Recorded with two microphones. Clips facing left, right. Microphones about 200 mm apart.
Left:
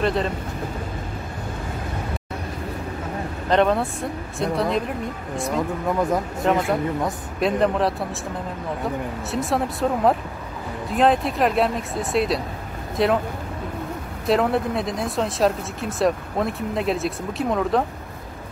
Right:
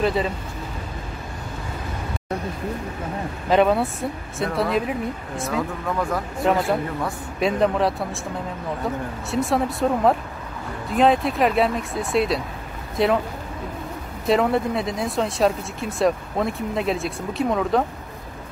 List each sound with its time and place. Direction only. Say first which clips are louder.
0.0 s speech: even; centre (ahead or behind)
3.4 s speech: right 1 dB; 5° right (ahead or behind)
5.9 s speech: left 5 dB; 20° left (ahead or behind)
6.4 s speech: right 1 dB; centre (ahead or behind)
14.2 s speech: right 1 dB; centre (ahead or behind)